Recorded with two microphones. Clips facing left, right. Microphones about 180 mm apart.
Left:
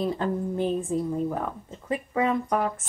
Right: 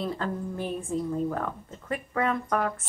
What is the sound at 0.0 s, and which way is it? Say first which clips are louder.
A woman's voice: left 4 dB; 20° left (ahead or behind).